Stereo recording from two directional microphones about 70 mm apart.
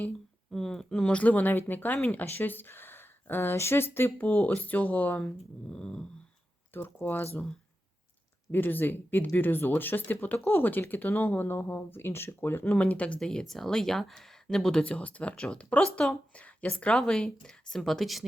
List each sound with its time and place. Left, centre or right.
0.5 s speech: centre; by 5.3 s left
5.6 s speech: centre
6.7 s speech: left
8.5 s speech: left
12.6 s speech: centre
13.1 s a woman's voice: centre